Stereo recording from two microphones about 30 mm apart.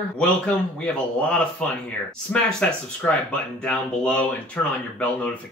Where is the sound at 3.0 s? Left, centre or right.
Left.